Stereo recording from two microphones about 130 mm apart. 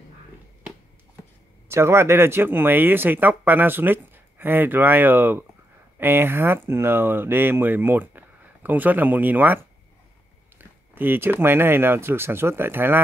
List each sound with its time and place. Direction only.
1.7 s speech: 20° right (ahead or behind)
10.6 s speech: 15° right (ahead or behind)